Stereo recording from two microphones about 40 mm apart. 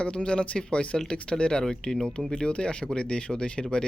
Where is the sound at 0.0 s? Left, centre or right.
Left.